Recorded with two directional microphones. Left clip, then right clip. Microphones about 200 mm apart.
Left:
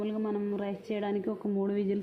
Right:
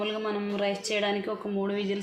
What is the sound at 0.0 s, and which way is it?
Speech, 40° left (ahead or behind).